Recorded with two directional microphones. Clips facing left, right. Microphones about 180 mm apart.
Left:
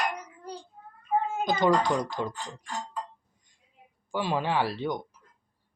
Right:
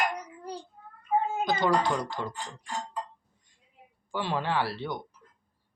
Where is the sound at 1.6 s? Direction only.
15° left (ahead or behind).